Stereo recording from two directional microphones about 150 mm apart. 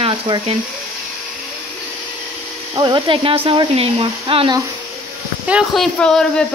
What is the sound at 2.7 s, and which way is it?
Speech, 30° right (ahead or behind).